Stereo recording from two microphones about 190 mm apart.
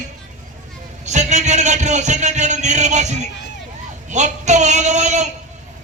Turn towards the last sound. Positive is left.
turn(degrees=-40)  # may be behind; listen again after turning